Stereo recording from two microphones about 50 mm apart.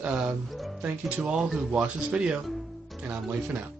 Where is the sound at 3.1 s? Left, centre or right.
Right.